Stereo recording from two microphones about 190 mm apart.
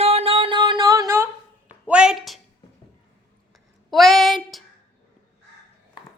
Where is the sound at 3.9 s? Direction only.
Centre (ahead or behind).